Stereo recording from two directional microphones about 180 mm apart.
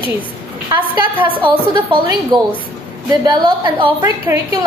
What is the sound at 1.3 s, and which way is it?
A woman's voice, 30° right (ahead or behind).